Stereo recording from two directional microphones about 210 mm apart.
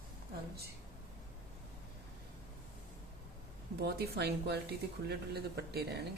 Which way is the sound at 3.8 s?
50° right (ahead or behind).